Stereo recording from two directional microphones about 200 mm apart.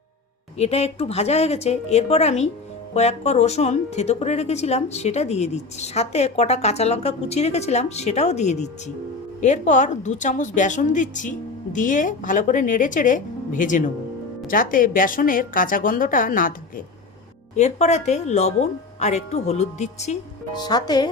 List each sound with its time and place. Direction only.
0.5 s a woman's voice: 30° left (ahead or behind)
20.5 s speech: 20° left (ahead or behind)